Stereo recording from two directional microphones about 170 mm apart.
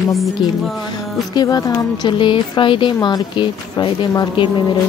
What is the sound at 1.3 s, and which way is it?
A woman's voice, 20° left (ahead or behind).